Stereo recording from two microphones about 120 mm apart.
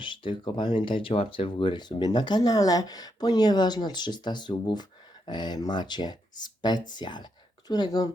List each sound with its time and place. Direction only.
0.0 s speech: 45° left (ahead or behind)